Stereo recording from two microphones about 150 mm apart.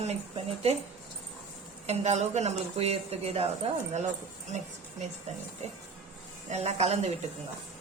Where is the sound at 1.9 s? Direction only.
45° right (ahead or behind).